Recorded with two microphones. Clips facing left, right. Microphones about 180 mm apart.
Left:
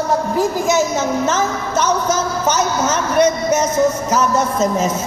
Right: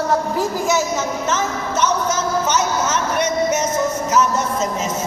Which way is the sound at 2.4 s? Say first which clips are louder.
Left 2 dB; 35° left (ahead or behind).